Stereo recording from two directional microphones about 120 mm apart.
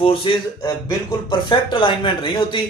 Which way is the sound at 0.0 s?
50° left (ahead or behind).